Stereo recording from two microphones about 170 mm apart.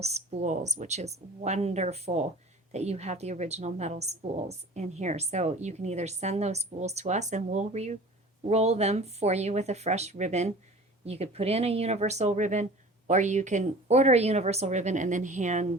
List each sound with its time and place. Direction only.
0.0 s a woman's voice: 45° right (ahead or behind)